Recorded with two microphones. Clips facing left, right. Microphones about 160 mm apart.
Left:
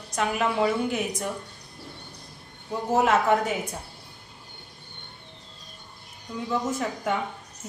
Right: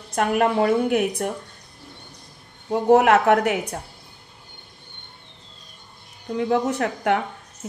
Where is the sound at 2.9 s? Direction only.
70° right (ahead or behind).